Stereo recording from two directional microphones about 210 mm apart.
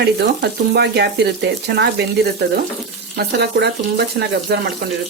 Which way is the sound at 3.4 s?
50° right (ahead or behind).